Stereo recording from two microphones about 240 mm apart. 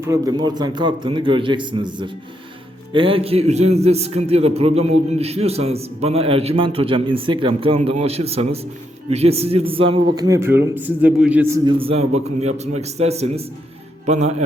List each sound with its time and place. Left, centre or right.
0.0 s a man's voice: centre